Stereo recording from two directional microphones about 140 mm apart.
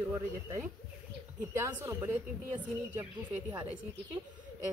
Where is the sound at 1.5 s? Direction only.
15° right (ahead or behind).